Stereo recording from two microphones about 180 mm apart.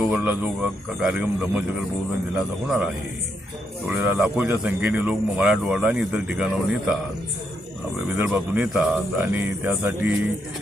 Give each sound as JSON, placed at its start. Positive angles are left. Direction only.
{"t": 0.0, "sound": "speech", "side_deg": -5}
{"t": 2.6, "sound": "speech", "side_deg": -5}
{"t": 8.1, "sound": "speech", "side_deg": -10}